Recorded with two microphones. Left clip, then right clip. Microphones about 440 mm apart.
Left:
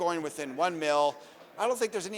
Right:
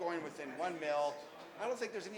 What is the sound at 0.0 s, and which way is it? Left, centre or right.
Speech, left.